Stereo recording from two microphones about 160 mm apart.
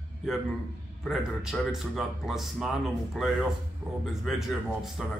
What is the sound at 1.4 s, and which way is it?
A man's voice, centre (ahead or behind).